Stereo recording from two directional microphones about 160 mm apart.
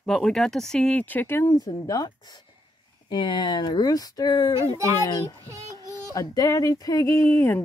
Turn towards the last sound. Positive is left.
turn(degrees=15)  # may be behind; listen again after turning